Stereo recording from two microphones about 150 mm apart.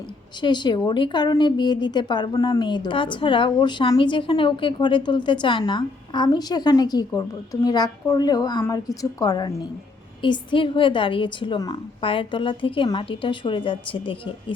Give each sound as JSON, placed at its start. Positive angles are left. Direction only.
{"t": 0.4, "sound": "a woman's voice", "side_deg": 30}